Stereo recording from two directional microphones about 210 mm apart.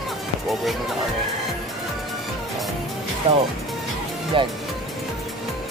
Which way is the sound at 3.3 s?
30° right (ahead or behind).